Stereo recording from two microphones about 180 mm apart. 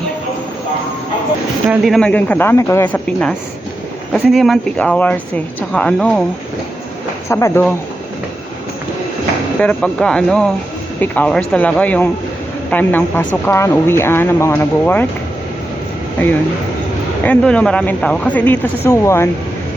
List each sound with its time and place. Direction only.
1.7 s speech: centre (ahead or behind)
7.3 s speech: 15° left (ahead or behind)
9.6 s speech: 5° left (ahead or behind)
17.2 s speech: 5° left (ahead or behind)